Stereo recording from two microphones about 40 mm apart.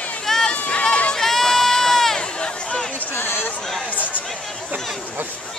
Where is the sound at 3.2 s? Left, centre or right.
Left.